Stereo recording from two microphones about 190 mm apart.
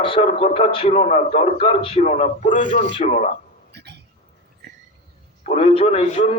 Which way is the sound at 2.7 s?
40° right (ahead or behind).